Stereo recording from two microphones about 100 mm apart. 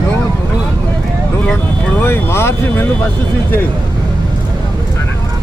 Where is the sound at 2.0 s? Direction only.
25° left (ahead or behind).